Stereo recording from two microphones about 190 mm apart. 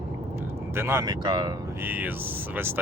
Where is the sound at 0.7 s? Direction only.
15° right (ahead or behind).